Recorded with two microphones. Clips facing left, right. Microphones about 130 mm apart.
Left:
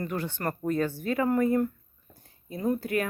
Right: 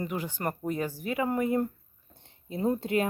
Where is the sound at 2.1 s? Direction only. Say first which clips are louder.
Right 1 dB; 25° right (ahead or behind).